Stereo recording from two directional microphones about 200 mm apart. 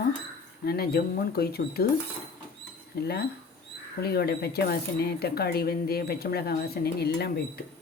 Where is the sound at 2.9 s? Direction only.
55° left (ahead or behind).